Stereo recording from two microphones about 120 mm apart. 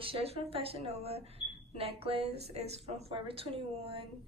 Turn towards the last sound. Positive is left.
turn(degrees=-55)  # may be behind; listen again after turning